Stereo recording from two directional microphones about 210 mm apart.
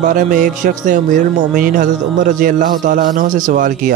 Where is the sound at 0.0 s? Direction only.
35° right (ahead or behind).